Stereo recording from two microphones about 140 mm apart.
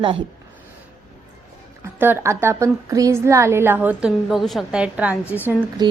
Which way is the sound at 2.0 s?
15° right (ahead or behind).